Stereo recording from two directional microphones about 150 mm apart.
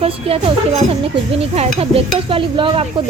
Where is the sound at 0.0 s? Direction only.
40° right (ahead or behind).